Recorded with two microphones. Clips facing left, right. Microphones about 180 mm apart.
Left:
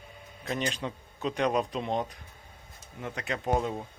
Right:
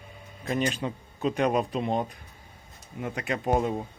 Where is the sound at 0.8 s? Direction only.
10° right (ahead or behind).